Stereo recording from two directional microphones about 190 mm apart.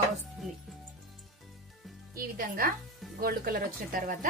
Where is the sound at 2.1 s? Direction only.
50° right (ahead or behind).